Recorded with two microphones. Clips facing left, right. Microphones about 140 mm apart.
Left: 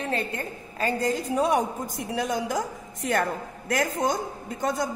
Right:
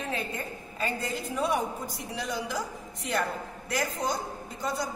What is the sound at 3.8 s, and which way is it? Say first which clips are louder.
A woman's voice: left 5 dB; 50° left (ahead or behind).